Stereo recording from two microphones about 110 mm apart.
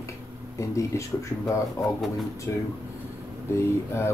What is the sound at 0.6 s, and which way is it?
Speech, 25° left (ahead or behind).